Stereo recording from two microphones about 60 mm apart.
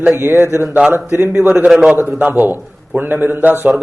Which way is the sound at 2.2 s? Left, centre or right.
Right.